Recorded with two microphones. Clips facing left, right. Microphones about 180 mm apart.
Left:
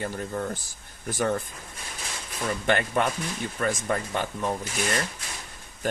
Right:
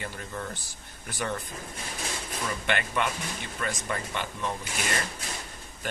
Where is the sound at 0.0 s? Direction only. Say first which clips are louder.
Left 6 dB; 40° left (ahead or behind).